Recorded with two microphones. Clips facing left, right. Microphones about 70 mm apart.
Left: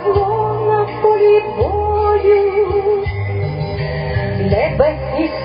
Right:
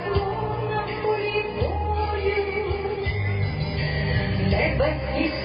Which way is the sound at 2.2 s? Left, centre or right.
Left.